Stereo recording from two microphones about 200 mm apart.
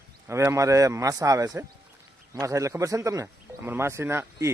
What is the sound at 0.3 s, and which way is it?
A man's voice, 15° right (ahead or behind).